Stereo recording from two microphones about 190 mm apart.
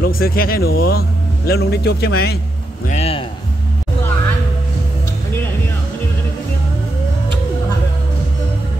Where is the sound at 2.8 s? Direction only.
35° left (ahead or behind).